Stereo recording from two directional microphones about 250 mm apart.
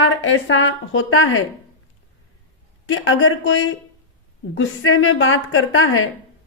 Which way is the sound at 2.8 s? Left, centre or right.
Left.